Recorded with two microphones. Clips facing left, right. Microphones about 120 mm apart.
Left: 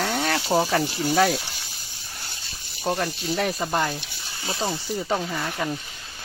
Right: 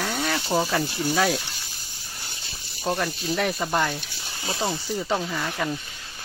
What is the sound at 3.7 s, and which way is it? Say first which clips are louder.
Speech: even; 30° left (ahead or behind).